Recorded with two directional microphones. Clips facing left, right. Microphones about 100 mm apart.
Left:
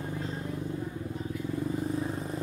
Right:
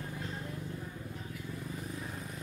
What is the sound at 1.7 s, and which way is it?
Vehicle, 30° left (ahead or behind).